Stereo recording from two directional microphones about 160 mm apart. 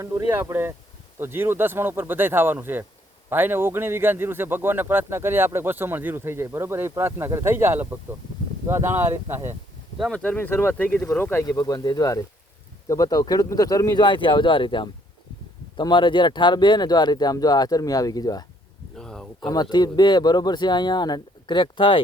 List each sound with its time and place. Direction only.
0.0 s a man's voice: 20° right (ahead or behind)
10.0 s speech: 5° left (ahead or behind); by 18.4 s 25° left (ahead or behind)
18.9 s a sound: 5° left (ahead or behind)
19.4 s speech: 25° left (ahead or behind)